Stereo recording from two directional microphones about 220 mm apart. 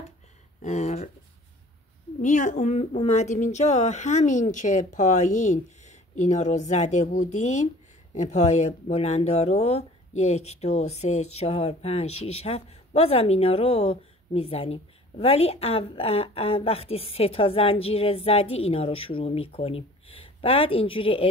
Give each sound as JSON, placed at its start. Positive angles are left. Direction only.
{"t": 0.6, "sound": "speech", "side_deg": 30}
{"t": 2.2, "sound": "speech", "side_deg": 35}